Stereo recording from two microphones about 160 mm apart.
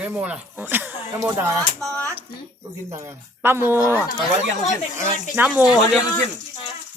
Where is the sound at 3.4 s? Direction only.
15° right (ahead or behind).